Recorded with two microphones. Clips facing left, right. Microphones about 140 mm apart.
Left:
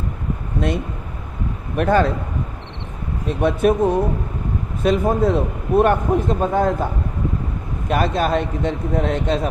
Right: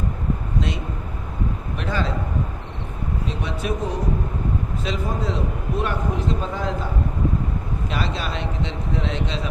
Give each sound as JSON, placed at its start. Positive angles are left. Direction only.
{"t": 1.7, "sound": "speech", "side_deg": 55}
{"t": 3.2, "sound": "a man's voice", "side_deg": 55}
{"t": 7.9, "sound": "a man's voice", "side_deg": 50}